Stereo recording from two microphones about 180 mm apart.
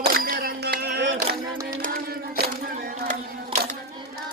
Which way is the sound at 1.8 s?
60° right (ahead or behind).